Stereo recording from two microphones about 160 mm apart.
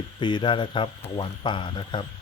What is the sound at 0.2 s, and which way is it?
Speech, 30° left (ahead or behind).